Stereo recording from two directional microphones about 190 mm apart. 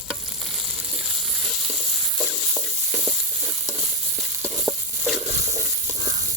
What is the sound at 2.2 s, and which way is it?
Stir, 5° right (ahead or behind).